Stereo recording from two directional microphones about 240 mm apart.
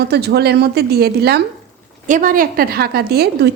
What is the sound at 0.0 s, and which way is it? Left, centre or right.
A woman's voice, right.